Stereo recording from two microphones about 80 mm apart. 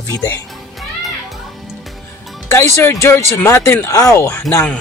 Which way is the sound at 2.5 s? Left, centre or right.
Left.